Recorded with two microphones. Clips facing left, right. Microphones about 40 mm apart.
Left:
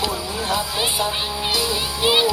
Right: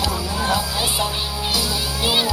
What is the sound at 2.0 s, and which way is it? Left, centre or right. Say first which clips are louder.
Children playing: left 3 dB; centre.